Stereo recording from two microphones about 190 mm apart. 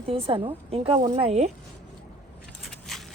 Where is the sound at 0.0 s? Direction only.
30° right (ahead or behind).